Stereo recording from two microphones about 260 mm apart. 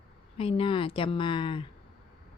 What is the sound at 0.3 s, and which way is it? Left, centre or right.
A woman's voice, left.